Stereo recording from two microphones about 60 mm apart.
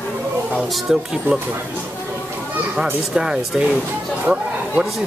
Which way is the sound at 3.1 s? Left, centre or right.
Centre.